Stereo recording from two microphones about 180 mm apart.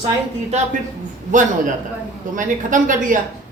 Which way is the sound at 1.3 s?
45° right (ahead or behind).